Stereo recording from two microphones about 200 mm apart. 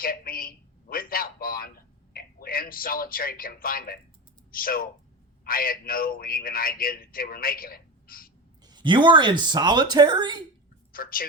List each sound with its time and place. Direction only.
0.0 s a man's voice: 45° left (ahead or behind)
8.6 s speech: 20° right (ahead or behind)
10.9 s a man's voice: 45° left (ahead or behind)